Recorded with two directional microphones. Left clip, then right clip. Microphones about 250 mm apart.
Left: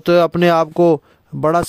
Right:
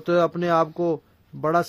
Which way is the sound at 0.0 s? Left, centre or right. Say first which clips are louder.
Left 8 dB; left.